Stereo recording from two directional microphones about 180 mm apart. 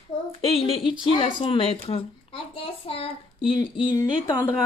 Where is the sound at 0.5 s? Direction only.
35° left (ahead or behind).